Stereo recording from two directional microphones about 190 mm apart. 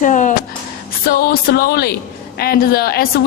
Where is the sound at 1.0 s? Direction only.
50° left (ahead or behind).